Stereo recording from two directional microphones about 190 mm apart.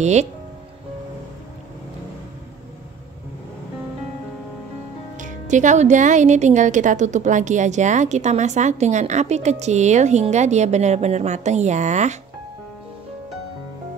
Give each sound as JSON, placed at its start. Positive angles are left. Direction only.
{"t": 0.0, "sound": "speech", "side_deg": -35}
{"t": 5.1, "sound": "speech", "side_deg": -40}